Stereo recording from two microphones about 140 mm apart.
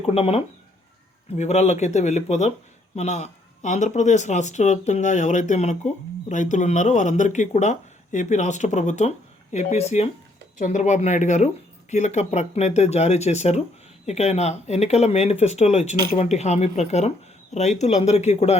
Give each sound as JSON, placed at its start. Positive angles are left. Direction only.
{"t": 0.0, "sound": "speech", "side_deg": 45}
{"t": 10.6, "sound": "speech", "side_deg": 65}